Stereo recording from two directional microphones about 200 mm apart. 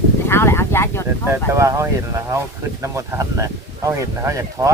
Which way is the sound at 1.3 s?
15° right (ahead or behind).